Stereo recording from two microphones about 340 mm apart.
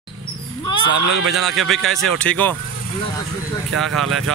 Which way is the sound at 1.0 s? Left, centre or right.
Right.